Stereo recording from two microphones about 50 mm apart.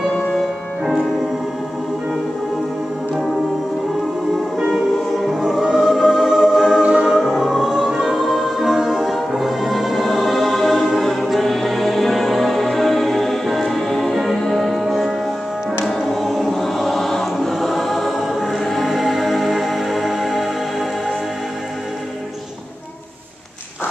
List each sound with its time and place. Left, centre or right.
0.3 s music: centre
4.6 s music: centre
6.8 s music: right
7.1 s music: centre
15.8 s choir: centre